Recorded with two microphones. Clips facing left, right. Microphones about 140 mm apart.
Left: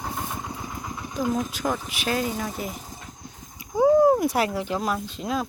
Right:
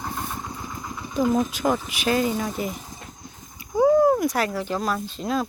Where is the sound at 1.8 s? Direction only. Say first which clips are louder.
Right 4 dB; centre (ahead or behind).